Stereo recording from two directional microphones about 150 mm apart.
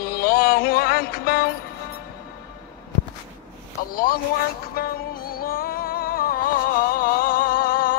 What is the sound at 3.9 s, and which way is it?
Speech, 75° left (ahead or behind).